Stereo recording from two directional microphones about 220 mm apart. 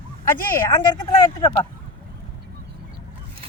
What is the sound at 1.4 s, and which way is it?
Speech, 20° left (ahead or behind).